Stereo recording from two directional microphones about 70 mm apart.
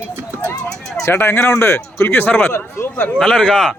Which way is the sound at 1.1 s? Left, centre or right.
Left.